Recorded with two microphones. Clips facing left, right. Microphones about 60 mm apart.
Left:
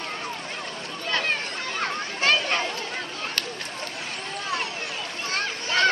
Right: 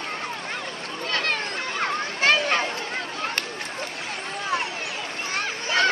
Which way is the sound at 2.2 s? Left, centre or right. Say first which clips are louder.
Right 2 dB; right.